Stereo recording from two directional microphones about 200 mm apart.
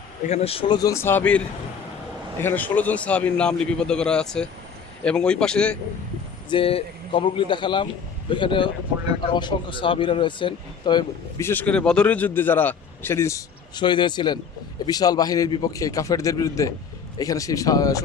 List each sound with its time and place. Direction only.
0.3 s a man's voice: 30° left (ahead or behind); by 1.4 s 10° left (ahead or behind)
2.4 s a man's voice: 10° left (ahead or behind)
6.5 s a man's voice: 25° left (ahead or behind)